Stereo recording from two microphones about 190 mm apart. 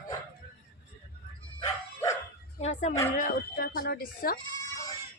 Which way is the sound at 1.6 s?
15° left (ahead or behind).